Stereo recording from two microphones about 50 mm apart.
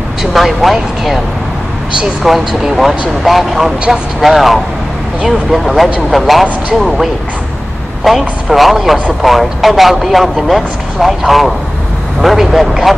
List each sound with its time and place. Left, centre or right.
0.2 s speech: centre
2.3 s speech: centre